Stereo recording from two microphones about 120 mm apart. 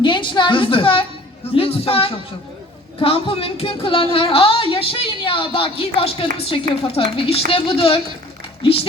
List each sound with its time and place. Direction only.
0.0 s a woman's voice: 40° left (ahead or behind)
1.5 s a sound: 50° left (ahead or behind)
3.0 s speech: 50° left (ahead or behind)